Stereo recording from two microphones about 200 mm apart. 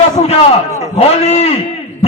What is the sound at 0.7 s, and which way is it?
Speech, 15° right (ahead or behind).